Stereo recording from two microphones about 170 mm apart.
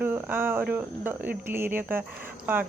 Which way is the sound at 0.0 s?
10° right (ahead or behind).